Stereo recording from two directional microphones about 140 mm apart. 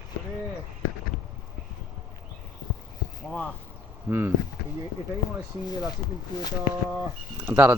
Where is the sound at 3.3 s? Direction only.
5° left (ahead or behind).